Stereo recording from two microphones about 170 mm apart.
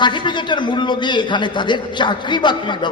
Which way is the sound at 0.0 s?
25° left (ahead or behind).